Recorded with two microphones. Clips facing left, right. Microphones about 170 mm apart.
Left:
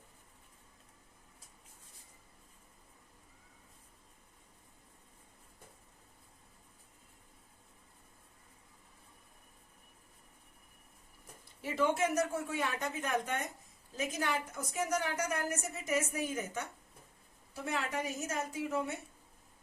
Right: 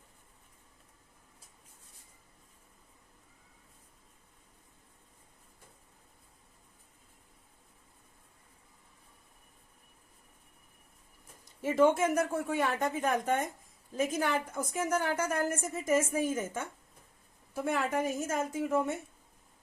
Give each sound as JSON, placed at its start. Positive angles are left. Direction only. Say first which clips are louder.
{"t": 11.4, "sound": "a woman's voice", "louder": "right 7 dB", "side_deg": -50}